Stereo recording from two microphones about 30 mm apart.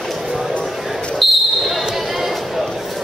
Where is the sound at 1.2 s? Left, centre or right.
Centre.